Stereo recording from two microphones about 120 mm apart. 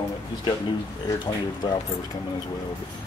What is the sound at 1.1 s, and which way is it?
Speech, 30° left (ahead or behind).